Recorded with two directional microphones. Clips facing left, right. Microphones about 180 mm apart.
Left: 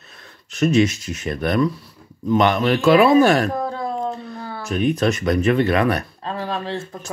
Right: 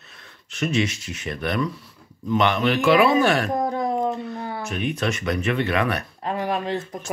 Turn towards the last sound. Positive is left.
turn(degrees=-20)  # may be behind; listen again after turning